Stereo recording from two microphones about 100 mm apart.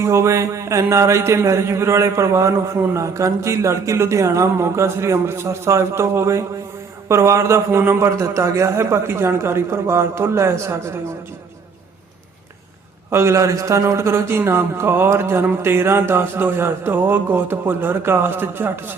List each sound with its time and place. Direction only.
0.0 s a man's voice: 30° right (ahead or behind)
13.1 s a man's voice: 25° right (ahead or behind)